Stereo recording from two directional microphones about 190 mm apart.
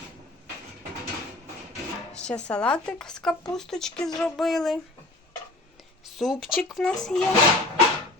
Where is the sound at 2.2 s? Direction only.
5° left (ahead or behind).